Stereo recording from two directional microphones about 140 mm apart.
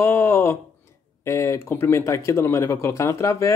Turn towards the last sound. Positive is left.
turn(degrees=20)  # may be behind; listen again after turning